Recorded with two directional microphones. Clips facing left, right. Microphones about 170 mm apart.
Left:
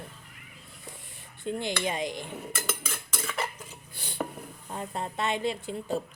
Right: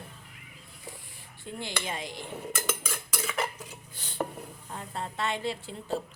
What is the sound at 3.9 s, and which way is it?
Dishes, 10° left (ahead or behind).